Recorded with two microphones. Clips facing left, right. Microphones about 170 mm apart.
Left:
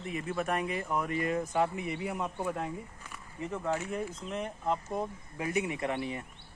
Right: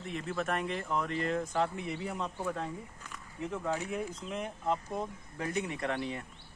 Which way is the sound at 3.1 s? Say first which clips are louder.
Even; 5° left (ahead or behind).